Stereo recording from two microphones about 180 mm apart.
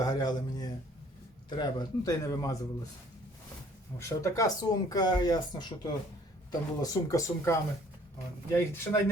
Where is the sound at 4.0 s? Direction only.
15° left (ahead or behind).